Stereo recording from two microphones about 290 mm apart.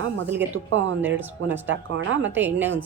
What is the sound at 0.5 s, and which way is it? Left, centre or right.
Speech, right.